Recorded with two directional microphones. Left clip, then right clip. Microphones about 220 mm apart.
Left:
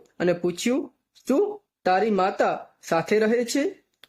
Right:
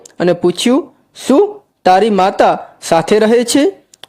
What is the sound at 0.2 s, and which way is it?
Speech, 35° right (ahead or behind).